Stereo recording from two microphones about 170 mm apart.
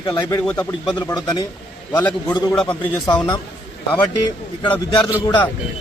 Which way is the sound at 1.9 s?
10° left (ahead or behind).